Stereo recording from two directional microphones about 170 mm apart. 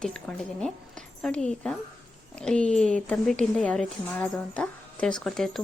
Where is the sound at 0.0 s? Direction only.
5° left (ahead or behind).